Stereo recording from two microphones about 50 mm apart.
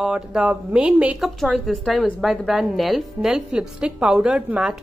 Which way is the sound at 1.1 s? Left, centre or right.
Centre.